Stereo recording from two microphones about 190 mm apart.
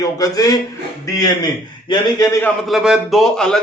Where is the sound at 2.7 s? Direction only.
5° right (ahead or behind).